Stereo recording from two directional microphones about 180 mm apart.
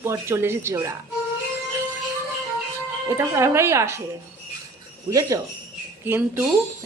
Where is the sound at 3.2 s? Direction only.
15° right (ahead or behind).